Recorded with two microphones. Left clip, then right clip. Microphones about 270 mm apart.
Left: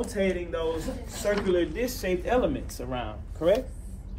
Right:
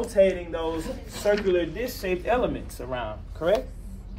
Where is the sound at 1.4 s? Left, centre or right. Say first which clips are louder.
Right 1 dB; centre.